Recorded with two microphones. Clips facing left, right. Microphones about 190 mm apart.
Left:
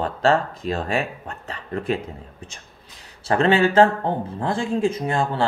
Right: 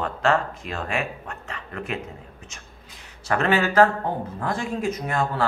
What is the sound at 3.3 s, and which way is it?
Speech, 30° left (ahead or behind).